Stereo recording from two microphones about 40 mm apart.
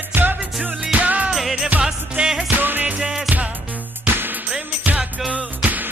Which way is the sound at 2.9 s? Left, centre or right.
Centre.